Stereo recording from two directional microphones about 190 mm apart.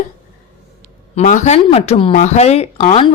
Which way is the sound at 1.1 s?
40° left (ahead or behind).